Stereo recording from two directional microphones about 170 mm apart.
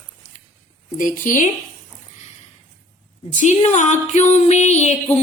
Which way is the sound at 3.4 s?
45° left (ahead or behind).